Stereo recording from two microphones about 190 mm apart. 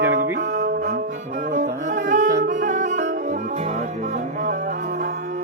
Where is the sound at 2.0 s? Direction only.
40° right (ahead or behind).